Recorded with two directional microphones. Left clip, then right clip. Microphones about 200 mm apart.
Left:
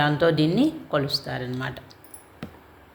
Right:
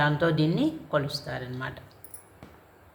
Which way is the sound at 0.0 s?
25° left (ahead or behind).